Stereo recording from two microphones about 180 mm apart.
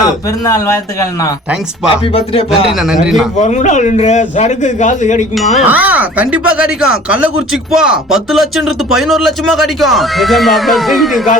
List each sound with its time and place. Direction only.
0.3 s speech: 20° left (ahead or behind)
1.9 s a man's voice: 30° left (ahead or behind)
2.7 s speech: centre (ahead or behind)
3.3 s a man's voice: 40° left (ahead or behind)
5.6 s speech: 10° right (ahead or behind)